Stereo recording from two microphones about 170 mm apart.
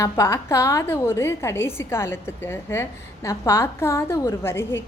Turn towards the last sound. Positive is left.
turn(degrees=15)  # may be behind; listen again after turning